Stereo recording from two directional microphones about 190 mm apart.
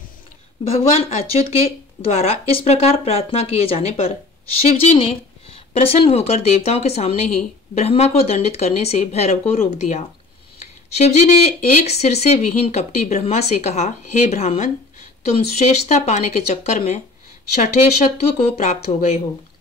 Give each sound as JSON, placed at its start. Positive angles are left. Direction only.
{"t": 0.7, "sound": "speech", "side_deg": 30}
{"t": 18.6, "sound": "speech", "side_deg": 40}